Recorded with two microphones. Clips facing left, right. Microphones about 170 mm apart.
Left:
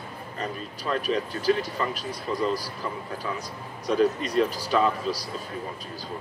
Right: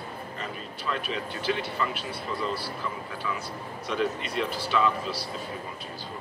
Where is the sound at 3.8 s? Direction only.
40° left (ahead or behind).